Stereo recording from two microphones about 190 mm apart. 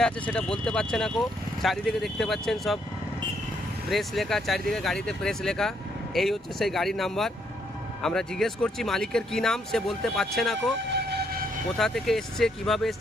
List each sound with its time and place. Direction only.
0.0 s speech: 5° left (ahead or behind)
3.8 s speech: centre (ahead or behind)
10.9 s siren: 55° right (ahead or behind)
11.8 s speech: centre (ahead or behind)